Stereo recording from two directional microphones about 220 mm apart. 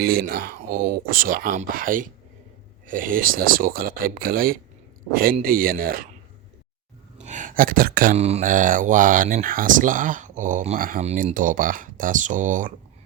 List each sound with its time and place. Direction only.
0.0 s speech: 40° right (ahead or behind)
7.3 s speech: 35° right (ahead or behind)